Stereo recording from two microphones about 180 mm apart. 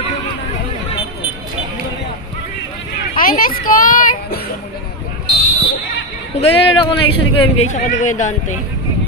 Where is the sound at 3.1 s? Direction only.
50° left (ahead or behind).